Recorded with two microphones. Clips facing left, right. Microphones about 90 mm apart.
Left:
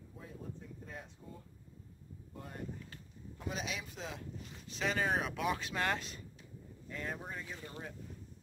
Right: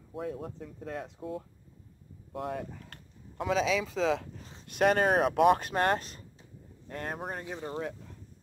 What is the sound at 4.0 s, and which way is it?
Speech, 90° right.